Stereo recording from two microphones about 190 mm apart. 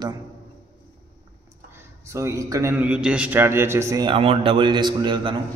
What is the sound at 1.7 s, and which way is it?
A man's voice, 15° right (ahead or behind).